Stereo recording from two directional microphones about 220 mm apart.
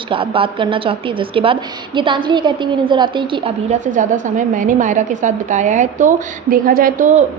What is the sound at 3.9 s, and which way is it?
A woman's voice, 35° right (ahead or behind).